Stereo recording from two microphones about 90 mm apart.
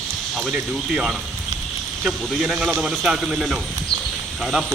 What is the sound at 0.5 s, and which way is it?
Speech, 10° right (ahead or behind).